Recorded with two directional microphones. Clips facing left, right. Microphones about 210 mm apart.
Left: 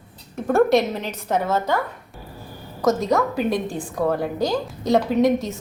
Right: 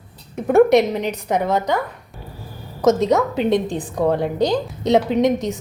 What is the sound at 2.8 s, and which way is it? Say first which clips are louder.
A woman's voice: right 4 dB; 20° right (ahead or behind).